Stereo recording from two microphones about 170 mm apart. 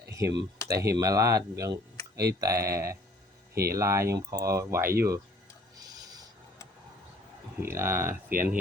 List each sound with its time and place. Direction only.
0.1 s speech: 20° right (ahead or behind)
3.5 s speech: 65° right (ahead or behind)
3.8 s speech: 20° right (ahead or behind)
5.8 s a sound: 20° right (ahead or behind)
7.6 s speech: 15° right (ahead or behind)
8.3 s speech: 55° right (ahead or behind)